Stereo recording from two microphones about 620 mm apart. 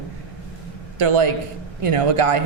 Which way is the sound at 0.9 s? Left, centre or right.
Right.